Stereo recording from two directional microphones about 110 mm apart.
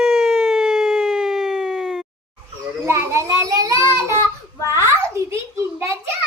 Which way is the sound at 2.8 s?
25° right (ahead or behind).